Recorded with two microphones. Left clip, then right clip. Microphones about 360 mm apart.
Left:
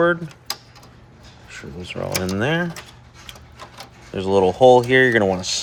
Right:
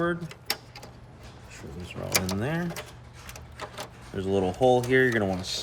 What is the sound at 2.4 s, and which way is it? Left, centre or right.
Speech, left.